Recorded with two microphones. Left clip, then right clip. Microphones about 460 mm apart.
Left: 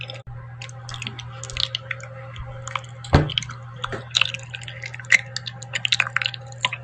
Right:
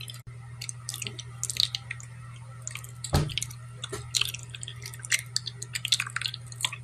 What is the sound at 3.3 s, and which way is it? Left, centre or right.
Drip, right.